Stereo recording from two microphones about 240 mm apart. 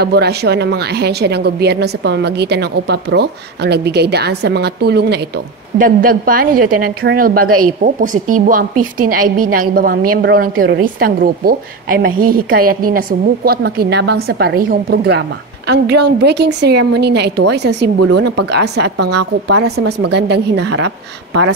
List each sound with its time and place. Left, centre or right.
0.0 s a woman's voice: right
8.0 s speech: right
8.4 s a woman's voice: right